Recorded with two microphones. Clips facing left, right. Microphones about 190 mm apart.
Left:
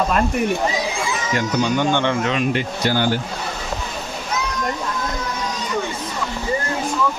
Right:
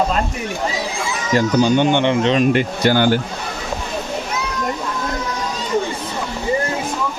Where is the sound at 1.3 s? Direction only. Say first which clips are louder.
Right 6 dB; 30° right (ahead or behind).